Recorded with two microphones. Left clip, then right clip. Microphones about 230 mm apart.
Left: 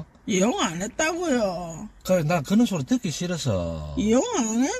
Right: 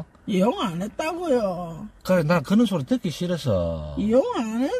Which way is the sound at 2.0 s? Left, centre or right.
Centre.